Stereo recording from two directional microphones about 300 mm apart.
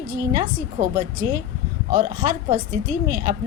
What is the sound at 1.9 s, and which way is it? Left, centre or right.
A woman's voice, right.